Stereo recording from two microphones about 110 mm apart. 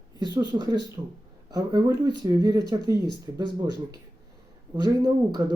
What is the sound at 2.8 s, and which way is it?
Speech, 40° left (ahead or behind).